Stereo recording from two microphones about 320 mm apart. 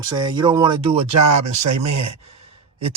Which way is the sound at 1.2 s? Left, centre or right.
Right.